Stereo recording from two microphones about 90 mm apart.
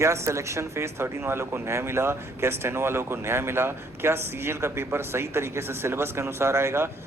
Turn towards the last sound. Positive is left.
turn(degrees=-30)  # may be behind; listen again after turning